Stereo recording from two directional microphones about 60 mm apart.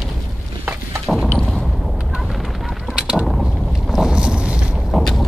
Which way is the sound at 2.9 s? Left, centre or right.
Centre.